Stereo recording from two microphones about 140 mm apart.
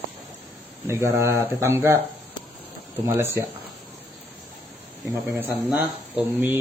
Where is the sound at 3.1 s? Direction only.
20° right (ahead or behind).